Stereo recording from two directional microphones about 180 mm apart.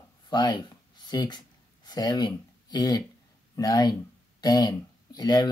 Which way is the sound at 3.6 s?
20° left (ahead or behind).